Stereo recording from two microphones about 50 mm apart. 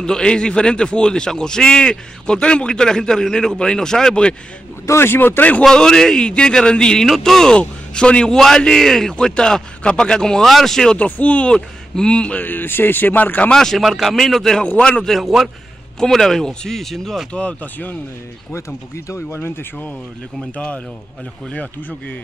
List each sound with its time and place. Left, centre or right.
0.0 s a man's voice: centre
4.8 s speech: left
5.6 s a man's voice: centre
11.0 s speech: left
12.4 s speech: left
13.5 s a man's voice: centre
13.8 s a man's voice: centre
14.8 s speech: left
15.0 s a man's voice: centre
17.3 s speech: left
19.0 s speech: left
20.5 s speech: left